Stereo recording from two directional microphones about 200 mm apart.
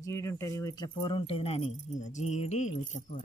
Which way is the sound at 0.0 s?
15° left (ahead or behind).